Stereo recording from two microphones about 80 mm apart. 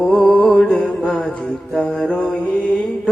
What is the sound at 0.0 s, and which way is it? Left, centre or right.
Music, centre.